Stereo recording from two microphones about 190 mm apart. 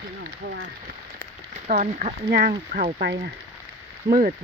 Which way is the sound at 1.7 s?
45° right (ahead or behind).